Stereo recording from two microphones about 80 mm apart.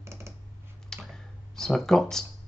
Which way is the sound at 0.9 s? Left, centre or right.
Centre.